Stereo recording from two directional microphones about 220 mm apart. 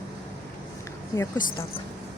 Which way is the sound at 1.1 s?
15° left (ahead or behind).